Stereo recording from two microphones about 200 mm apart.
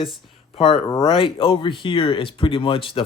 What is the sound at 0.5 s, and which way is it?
Speech, 25° left (ahead or behind).